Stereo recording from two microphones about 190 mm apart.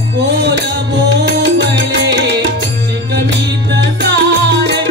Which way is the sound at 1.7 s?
65° right (ahead or behind).